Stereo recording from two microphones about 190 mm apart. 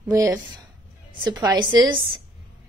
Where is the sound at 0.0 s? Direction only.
10° right (ahead or behind).